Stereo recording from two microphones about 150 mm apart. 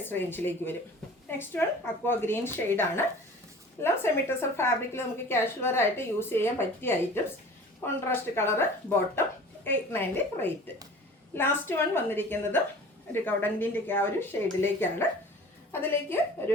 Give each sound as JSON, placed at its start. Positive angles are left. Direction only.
{"t": 0.0, "sound": "a woman's voice", "side_deg": 15}